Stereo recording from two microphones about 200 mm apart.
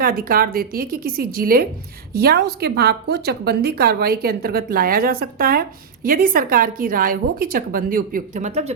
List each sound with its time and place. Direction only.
0.0 s a woman's voice: 45° right (ahead or behind)